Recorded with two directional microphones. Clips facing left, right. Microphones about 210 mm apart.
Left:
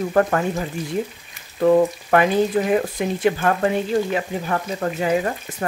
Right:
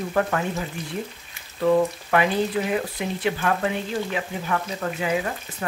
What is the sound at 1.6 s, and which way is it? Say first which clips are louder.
Speech: left 4 dB; 45° left (ahead or behind).